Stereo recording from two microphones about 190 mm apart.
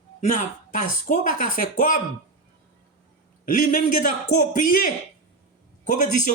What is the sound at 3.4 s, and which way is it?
Speech, 45° left (ahead or behind).